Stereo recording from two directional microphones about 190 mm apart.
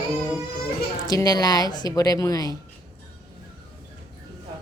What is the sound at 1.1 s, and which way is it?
Speech, 20° left (ahead or behind).